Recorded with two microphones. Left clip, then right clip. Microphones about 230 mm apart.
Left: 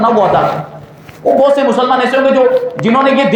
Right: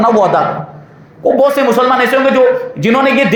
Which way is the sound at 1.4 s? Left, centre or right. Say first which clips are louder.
Even; right.